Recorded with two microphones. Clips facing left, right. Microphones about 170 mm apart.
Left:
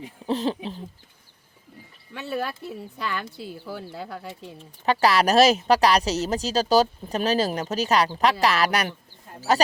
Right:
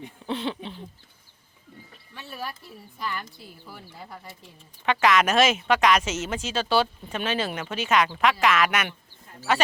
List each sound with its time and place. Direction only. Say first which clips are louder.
0.3 s a woman's voice: left 5 dB; 40° left (ahead or behind)
2.1 s speech: left 8 dB; 70° left (ahead or behind)
3.5 s speech: left 10 dB; 90° left
4.9 s a woman's voice: left 2 dB; 35° left (ahead or behind)